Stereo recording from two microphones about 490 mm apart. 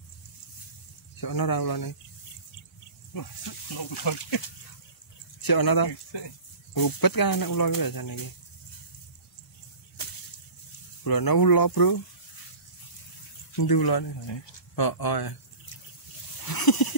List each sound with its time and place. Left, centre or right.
1.2 s speech: left
3.7 s speech: left
5.4 s speech: left
11.1 s speech: left
13.6 s speech: left
16.4 s a sound: left